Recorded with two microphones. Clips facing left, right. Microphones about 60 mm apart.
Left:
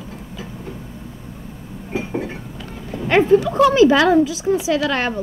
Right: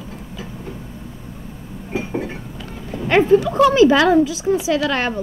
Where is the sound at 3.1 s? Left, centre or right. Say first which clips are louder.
Even; centre.